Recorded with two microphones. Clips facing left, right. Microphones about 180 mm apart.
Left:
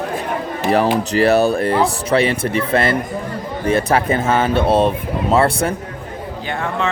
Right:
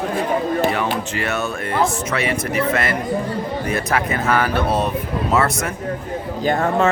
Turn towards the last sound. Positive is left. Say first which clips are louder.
# right 5 dB
turn(degrees=-40)  # may be behind; listen again after turning